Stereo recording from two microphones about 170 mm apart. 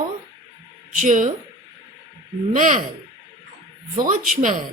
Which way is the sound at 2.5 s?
50° right (ahead or behind).